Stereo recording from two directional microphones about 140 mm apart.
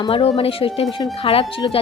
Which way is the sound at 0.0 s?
40° left (ahead or behind).